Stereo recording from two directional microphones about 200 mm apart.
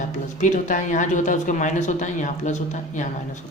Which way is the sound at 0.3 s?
40° left (ahead or behind).